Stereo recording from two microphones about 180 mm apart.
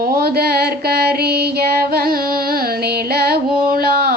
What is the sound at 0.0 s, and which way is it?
Mantra, 55° right (ahead or behind).